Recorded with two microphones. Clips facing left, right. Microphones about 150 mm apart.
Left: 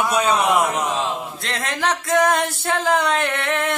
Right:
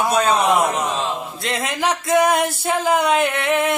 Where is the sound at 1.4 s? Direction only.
10° right (ahead or behind).